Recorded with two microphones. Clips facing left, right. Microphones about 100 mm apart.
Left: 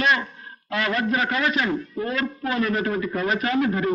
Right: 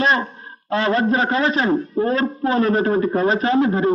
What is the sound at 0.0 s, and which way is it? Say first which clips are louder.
A man's voice: right 4 dB; 35° right (ahead or behind).